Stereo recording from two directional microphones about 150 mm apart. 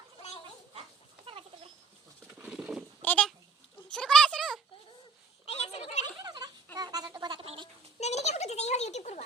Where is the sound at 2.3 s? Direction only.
10° right (ahead or behind).